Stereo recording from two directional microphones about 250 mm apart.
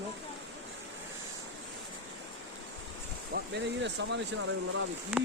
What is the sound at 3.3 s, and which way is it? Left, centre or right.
Speech, right.